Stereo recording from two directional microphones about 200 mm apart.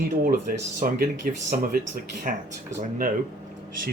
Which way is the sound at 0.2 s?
45° right (ahead or behind).